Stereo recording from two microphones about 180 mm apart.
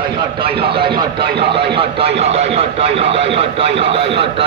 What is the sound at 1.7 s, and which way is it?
Speech, 30° right (ahead or behind).